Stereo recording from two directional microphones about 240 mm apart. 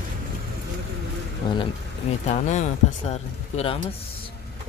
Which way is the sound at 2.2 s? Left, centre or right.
Left.